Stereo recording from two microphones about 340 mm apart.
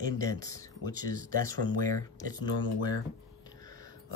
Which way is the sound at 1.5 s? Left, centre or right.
Right.